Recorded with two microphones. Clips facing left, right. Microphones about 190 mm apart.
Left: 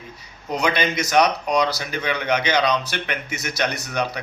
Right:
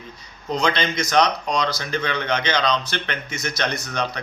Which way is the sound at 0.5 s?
10° left (ahead or behind).